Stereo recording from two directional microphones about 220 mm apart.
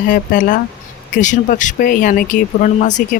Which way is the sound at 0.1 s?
35° left (ahead or behind).